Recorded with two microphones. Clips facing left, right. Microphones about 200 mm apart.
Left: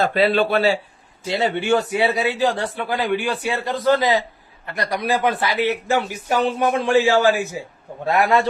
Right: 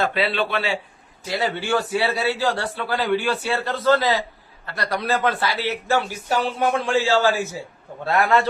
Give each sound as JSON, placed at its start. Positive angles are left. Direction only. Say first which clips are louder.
{"t": 0.0, "sound": "speech", "louder": "left 5 dB", "side_deg": 40}
{"t": 1.2, "sound": "a man's voice", "louder": "left 3 dB", "side_deg": 25}